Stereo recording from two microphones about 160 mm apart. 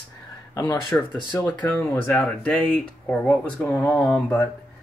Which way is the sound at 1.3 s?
10° left (ahead or behind).